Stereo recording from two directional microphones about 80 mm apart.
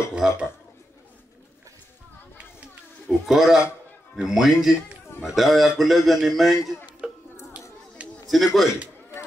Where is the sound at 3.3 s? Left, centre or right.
Centre.